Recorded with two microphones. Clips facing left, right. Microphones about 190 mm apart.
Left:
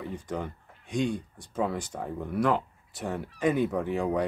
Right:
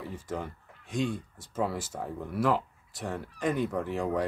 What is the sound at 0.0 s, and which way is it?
Speech, 5° right (ahead or behind).